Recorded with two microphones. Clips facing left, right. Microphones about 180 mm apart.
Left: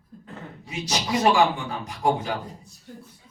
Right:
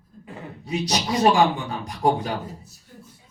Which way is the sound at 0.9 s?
35° right (ahead or behind).